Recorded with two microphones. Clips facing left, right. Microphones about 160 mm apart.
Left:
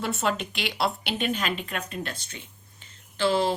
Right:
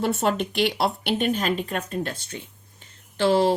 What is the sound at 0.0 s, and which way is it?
Speech, 50° right (ahead or behind).